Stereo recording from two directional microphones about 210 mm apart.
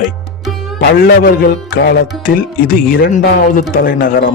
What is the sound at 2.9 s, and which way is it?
Speech, 45° left (ahead or behind).